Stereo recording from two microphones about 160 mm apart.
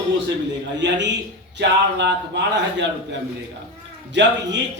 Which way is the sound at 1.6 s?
90° right.